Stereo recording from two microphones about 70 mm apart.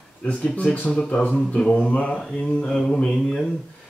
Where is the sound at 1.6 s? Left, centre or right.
Centre.